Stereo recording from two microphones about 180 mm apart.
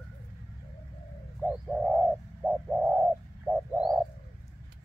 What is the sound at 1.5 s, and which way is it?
Bird, 5° right (ahead or behind).